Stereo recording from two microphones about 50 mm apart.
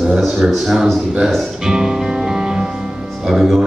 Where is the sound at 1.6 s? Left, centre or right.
Centre.